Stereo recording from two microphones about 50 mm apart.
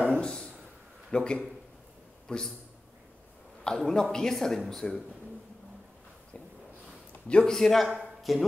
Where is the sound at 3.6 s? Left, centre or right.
Centre.